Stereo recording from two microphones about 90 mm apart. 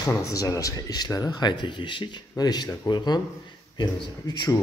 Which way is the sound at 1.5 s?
60° left (ahead or behind).